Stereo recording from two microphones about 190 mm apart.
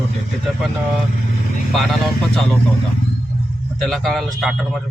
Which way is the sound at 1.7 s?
Centre (ahead or behind).